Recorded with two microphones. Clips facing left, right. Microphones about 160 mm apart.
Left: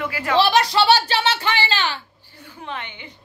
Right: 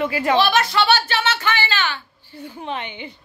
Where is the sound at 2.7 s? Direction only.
20° right (ahead or behind).